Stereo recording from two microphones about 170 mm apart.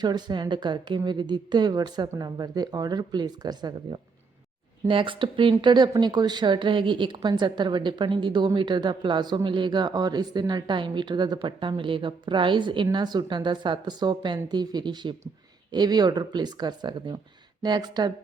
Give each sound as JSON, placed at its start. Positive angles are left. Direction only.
{"t": 0.0, "sound": "speech", "side_deg": -25}
{"t": 4.9, "sound": "speech", "side_deg": -30}